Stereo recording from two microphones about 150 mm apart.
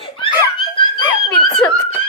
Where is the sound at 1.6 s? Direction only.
10° left (ahead or behind).